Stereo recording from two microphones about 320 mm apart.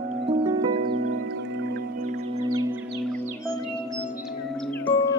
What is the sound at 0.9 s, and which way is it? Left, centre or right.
Music, right.